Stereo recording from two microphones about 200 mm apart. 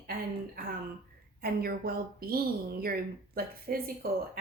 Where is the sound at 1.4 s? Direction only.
50° right (ahead or behind).